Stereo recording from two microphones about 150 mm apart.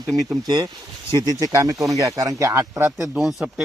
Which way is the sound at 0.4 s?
25° right (ahead or behind).